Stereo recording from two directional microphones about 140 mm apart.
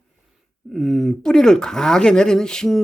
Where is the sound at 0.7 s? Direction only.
Centre (ahead or behind).